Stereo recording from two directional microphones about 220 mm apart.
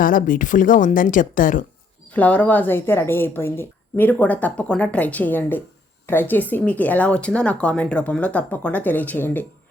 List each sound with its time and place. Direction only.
0.0 s speech: 40° left (ahead or behind)
2.1 s speech: 5° left (ahead or behind)